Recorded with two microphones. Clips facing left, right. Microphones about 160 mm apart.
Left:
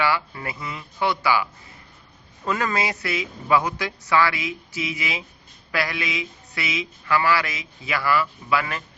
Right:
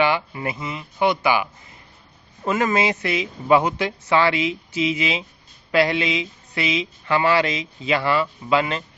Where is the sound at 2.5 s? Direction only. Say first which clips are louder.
Right 4 dB; 20° right (ahead or behind).